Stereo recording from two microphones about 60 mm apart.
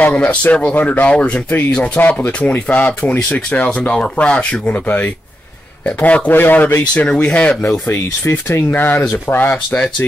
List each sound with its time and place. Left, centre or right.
0.0 s speech: left
6.9 s speech: left
7.9 s speech: left